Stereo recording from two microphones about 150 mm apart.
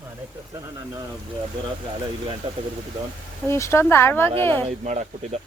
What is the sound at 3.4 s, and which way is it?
Speech, 20° left (ahead or behind).